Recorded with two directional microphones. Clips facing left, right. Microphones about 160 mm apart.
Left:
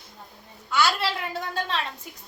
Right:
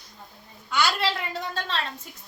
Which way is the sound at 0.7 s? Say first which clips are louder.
Left 1 dB; 5° left (ahead or behind).